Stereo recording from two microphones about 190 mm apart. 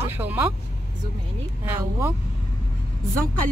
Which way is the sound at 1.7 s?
10° right (ahead or behind).